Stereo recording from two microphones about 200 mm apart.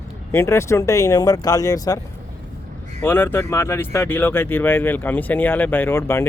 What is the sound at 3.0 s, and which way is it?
Speech, 10° left (ahead or behind).